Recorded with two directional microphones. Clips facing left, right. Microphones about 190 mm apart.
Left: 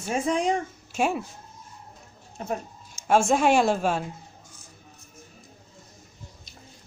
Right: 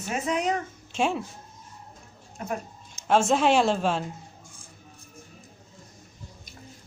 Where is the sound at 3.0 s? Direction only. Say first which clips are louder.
Left 1 dB; 10° left (ahead or behind).